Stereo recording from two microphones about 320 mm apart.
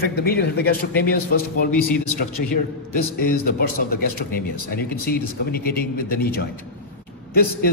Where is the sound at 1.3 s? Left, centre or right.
Left.